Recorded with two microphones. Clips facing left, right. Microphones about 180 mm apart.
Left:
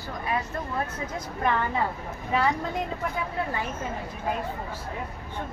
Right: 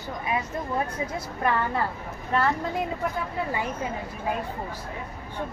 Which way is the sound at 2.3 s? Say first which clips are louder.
Right 1 dB; centre (ahead or behind).